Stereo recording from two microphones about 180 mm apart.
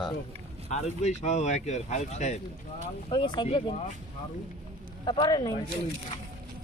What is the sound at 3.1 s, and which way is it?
Speech, 25° left (ahead or behind).